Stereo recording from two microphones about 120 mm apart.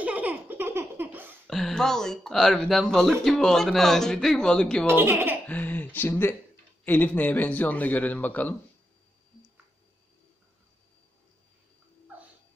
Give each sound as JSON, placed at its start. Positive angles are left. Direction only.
{"t": 0.0, "sound": "baby laughter", "side_deg": -15}
{"t": 1.5, "sound": "speech", "side_deg": 0}
{"t": 4.8, "sound": "speech", "side_deg": -20}
{"t": 5.5, "sound": "a man's voice", "side_deg": 15}